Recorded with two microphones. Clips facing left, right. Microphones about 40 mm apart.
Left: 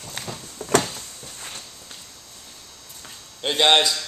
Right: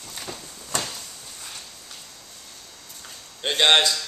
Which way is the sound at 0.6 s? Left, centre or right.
Left.